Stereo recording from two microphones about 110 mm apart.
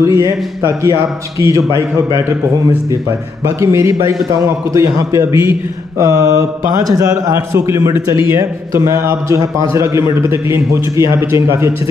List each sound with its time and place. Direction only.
0.0 s a man's voice: 30° right (ahead or behind)
3.4 s a man's voice: 25° right (ahead or behind)